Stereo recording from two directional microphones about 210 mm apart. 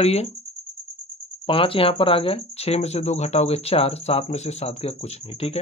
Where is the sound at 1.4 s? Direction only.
25° left (ahead or behind).